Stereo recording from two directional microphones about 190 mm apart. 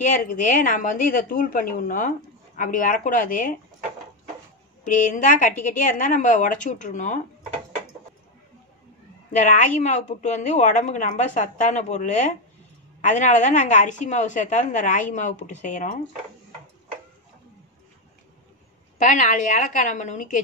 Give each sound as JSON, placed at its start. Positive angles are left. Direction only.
{"t": 0.0, "sound": "a woman's voice", "side_deg": 45}
{"t": 4.8, "sound": "a woman's voice", "side_deg": 45}
{"t": 9.3, "sound": "a woman's voice", "side_deg": 40}
{"t": 18.9, "sound": "a woman's voice", "side_deg": 40}